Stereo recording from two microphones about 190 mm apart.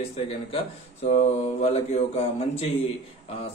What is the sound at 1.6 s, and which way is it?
A man's voice, 35° left (ahead or behind).